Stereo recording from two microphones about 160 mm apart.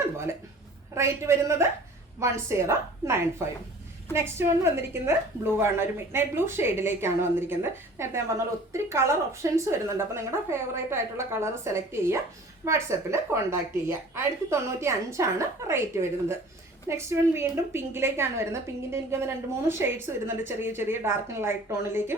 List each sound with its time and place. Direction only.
0.9 s a woman's voice: 15° right (ahead or behind)